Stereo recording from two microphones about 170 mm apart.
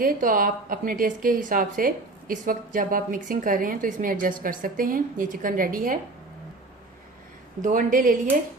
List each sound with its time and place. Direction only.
0.0 s a woman's voice: 55° right (ahead or behind)
7.6 s a woman's voice: 50° right (ahead or behind)